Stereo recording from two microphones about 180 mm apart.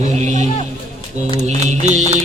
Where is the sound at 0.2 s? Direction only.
40° right (ahead or behind).